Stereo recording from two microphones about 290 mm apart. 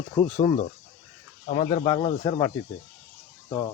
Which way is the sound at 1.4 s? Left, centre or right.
Left.